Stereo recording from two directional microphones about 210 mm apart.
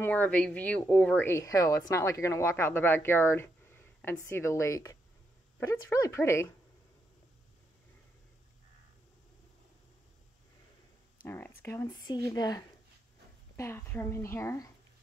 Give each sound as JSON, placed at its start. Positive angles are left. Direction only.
{"t": 0.0, "sound": "speech", "side_deg": 5}
{"t": 11.2, "sound": "speech", "side_deg": 10}